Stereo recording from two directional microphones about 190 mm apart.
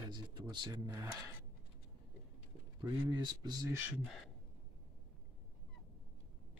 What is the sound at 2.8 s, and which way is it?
Speech, 20° right (ahead or behind).